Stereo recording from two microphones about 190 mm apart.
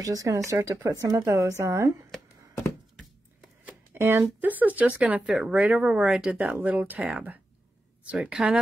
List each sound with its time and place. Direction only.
0.0 s speech: 15° right (ahead or behind)
3.6 s speech: 10° right (ahead or behind)